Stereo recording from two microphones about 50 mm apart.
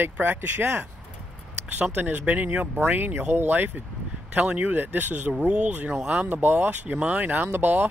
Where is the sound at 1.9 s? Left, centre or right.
Right.